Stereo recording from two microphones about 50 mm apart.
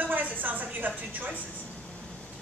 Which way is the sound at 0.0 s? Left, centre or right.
Right.